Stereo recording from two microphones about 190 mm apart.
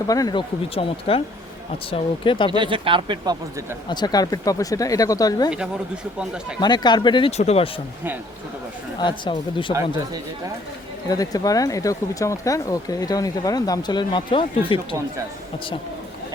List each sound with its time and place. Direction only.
0.1 s speech: 20° left (ahead or behind)
2.5 s speech: 25° right (ahead or behind)
3.8 s speech: 20° left (ahead or behind)
6.6 s speech: 20° left (ahead or behind)
9.0 s speech: 25° left (ahead or behind)
11.1 s speech: 20° left (ahead or behind)